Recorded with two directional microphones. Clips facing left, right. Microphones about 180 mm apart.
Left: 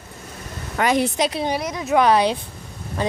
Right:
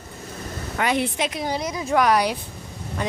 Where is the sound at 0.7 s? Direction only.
40° left (ahead or behind).